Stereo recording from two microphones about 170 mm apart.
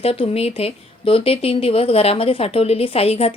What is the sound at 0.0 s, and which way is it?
Speech, 35° left (ahead or behind).